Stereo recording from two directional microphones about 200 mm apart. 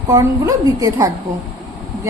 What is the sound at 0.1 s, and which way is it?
A woman's voice, 15° right (ahead or behind).